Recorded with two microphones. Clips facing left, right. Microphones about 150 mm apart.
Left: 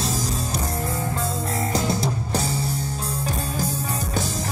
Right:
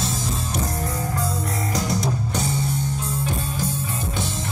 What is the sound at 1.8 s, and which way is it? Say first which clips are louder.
Music: right 2 dB; 30° left (ahead or behind).